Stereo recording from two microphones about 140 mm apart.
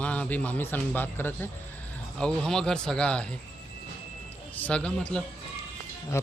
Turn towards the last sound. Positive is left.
turn(degrees=20)  # may be behind; listen again after turning